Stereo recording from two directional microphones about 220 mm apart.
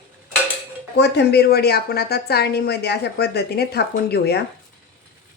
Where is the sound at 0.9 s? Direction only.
50° left (ahead or behind).